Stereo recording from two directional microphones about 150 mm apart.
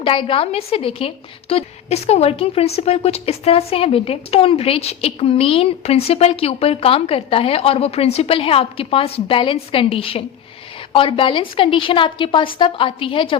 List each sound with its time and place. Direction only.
0.0 s a woman's voice: 35° left (ahead or behind)